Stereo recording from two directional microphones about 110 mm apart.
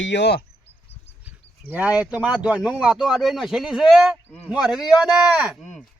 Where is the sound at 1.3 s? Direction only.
15° right (ahead or behind).